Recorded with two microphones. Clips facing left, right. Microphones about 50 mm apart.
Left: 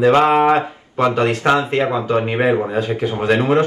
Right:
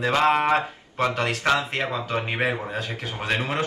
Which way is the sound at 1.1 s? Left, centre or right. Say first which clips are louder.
Left 7 dB; left.